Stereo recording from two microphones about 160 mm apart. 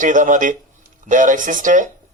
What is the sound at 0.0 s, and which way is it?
Speech, 55° right (ahead or behind).